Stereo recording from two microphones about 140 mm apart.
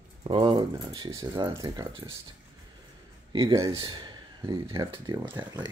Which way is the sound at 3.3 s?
35° right (ahead or behind).